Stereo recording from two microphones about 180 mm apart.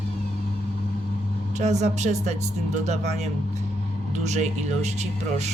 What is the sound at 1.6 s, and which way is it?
Speech, 40° right (ahead or behind).